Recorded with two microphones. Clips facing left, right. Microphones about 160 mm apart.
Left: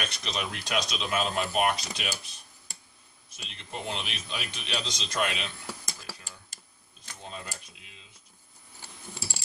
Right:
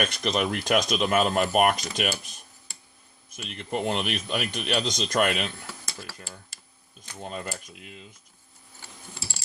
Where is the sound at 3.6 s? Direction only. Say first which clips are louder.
Right 9 dB; 55° right (ahead or behind).